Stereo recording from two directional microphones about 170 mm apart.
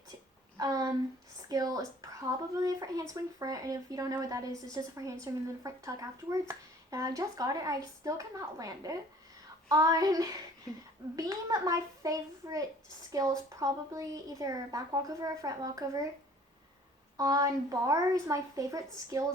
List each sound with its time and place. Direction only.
0.5 s a woman's voice: 20° right (ahead or behind)
17.2 s a woman's voice: 20° right (ahead or behind)